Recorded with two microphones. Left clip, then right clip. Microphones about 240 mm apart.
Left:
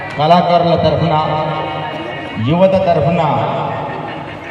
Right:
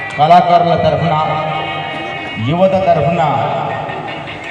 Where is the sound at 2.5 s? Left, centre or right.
Left.